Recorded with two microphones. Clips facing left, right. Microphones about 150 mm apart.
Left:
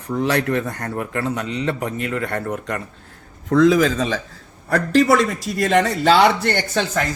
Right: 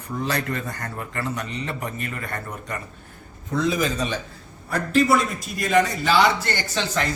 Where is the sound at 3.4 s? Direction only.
90° left; by 7.0 s 55° left (ahead or behind).